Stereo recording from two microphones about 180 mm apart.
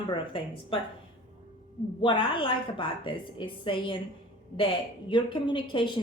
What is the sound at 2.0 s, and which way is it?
A woman's voice, 30° left (ahead or behind).